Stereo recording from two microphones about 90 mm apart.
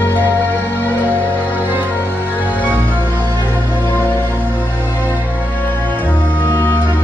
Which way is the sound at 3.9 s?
25° left (ahead or behind).